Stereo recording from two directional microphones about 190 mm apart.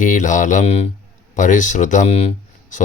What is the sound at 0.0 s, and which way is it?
Speech, 40° left (ahead or behind).